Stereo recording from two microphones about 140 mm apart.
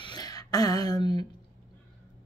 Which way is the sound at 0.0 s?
30° left (ahead or behind).